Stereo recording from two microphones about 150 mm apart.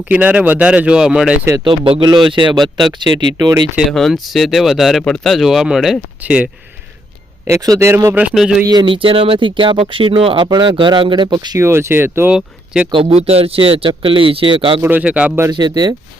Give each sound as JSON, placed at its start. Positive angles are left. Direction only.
{"t": 0.1, "sound": "speech", "side_deg": -10}
{"t": 1.6, "sound": "speech", "side_deg": -35}
{"t": 2.6, "sound": "speech", "side_deg": 0}
{"t": 3.0, "sound": "speech", "side_deg": -30}
{"t": 3.8, "sound": "speech", "side_deg": 0}
{"t": 7.4, "sound": "speech", "side_deg": -20}
{"t": 8.7, "sound": "speech", "side_deg": -30}
{"t": 11.6, "sound": "speech", "side_deg": -15}
{"t": 12.9, "sound": "speech", "side_deg": -40}
{"t": 14.8, "sound": "speech", "side_deg": -10}
{"t": 15.4, "sound": "speech", "side_deg": -30}